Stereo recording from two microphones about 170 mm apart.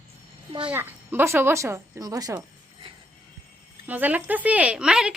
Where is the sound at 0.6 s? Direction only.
10° right (ahead or behind).